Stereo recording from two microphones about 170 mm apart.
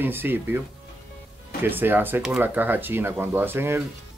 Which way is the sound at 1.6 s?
10° right (ahead or behind).